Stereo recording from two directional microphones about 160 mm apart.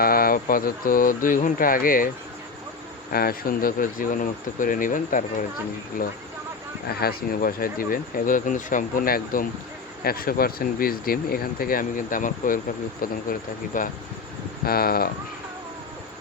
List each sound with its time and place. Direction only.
0.0 s speech: 65° left (ahead or behind)
3.1 s speech: 70° left (ahead or behind)
6.8 s speech: 75° left (ahead or behind); by 13.9 s 55° left (ahead or behind)
14.6 s speech: 70° left (ahead or behind)